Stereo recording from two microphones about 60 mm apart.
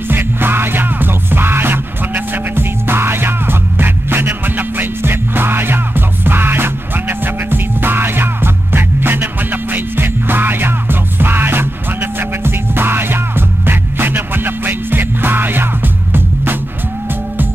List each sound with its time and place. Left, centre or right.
0.1 s music: right